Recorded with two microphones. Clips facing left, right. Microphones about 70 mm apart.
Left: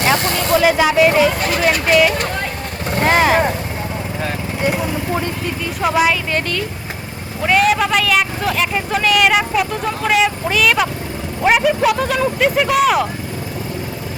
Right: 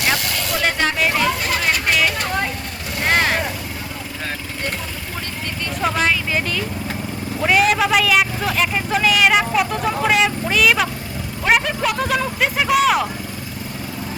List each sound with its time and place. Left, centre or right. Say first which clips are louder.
0.0 s vehicle: left 5 dB; left
0.6 s speech: left 6 dB; centre
3.1 s vehicle: left 4 dB; centre
5.8 s speech: left 4 dB; centre